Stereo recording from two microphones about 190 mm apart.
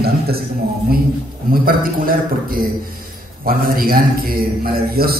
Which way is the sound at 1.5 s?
50° right (ahead or behind).